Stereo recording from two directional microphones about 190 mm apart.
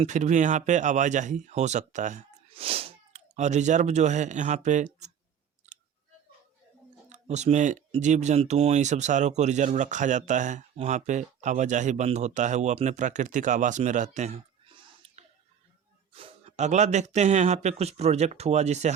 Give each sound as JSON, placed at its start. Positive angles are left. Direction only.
{"t": 0.0, "sound": "speech", "side_deg": -40}
{"t": 7.1, "sound": "speech", "side_deg": -35}